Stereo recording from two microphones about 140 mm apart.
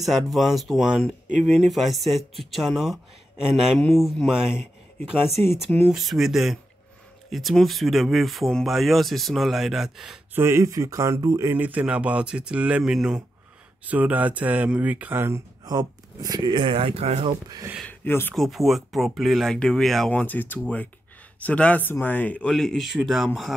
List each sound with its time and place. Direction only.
0.0 s speech: centre (ahead or behind)
5.9 s speech: centre (ahead or behind)
10.3 s speech: 20° right (ahead or behind)
15.6 s speech: 30° right (ahead or behind); by 17.3 s 45° right (ahead or behind)
17.8 s speech: 15° left (ahead or behind)
18.3 s speech: centre (ahead or behind)